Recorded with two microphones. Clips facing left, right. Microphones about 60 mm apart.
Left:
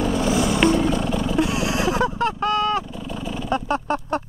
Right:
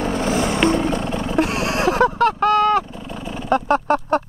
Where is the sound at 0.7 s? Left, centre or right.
Right.